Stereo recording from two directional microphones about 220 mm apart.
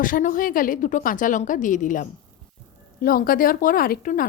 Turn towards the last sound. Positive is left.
turn(degrees=40)  # may be behind; listen again after turning